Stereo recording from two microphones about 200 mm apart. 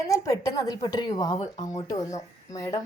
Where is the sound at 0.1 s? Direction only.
15° left (ahead or behind).